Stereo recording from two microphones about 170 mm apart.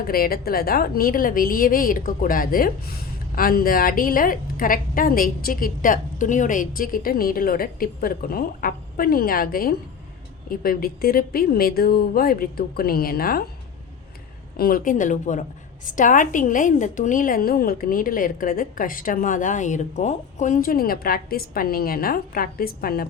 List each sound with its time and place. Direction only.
0.0 s a woman's voice: 60° left (ahead or behind)
14.5 s a woman's voice: 60° left (ahead or behind)